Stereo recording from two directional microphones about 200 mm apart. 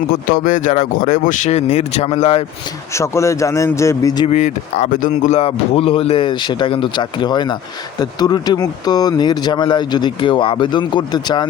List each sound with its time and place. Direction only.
0.1 s speech: 45° left (ahead or behind)
2.9 s a man's voice: 15° left (ahead or behind)
4.3 s speech: 35° left (ahead or behind)